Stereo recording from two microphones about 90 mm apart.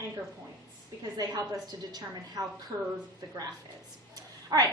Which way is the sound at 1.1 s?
45° right (ahead or behind).